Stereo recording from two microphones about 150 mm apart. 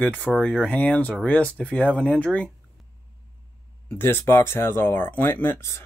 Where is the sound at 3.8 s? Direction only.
15° left (ahead or behind).